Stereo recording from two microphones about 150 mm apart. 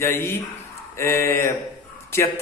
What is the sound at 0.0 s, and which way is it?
A man's voice, 15° left (ahead or behind).